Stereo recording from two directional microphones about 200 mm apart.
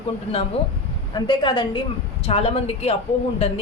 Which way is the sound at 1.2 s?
25° left (ahead or behind).